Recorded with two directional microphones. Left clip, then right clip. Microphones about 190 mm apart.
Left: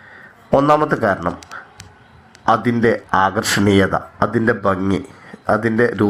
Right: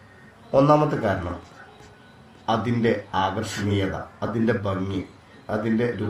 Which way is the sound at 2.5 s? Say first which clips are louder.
Left 8 dB; 55° left (ahead or behind).